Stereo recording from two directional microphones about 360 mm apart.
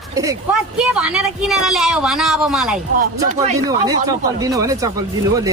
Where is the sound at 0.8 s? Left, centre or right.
Centre.